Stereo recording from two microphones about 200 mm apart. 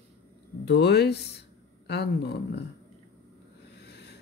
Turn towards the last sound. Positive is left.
turn(degrees=55)  # may be behind; listen again after turning